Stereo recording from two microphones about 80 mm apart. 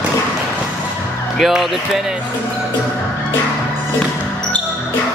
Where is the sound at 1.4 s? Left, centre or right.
Centre.